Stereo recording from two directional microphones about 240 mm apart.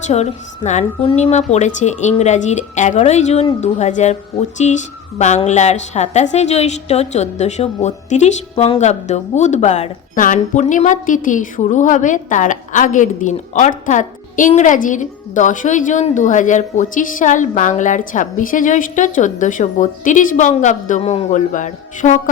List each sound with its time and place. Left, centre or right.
0.1 s a woman's voice: left